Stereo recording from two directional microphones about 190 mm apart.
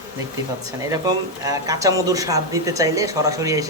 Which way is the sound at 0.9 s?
20° right (ahead or behind).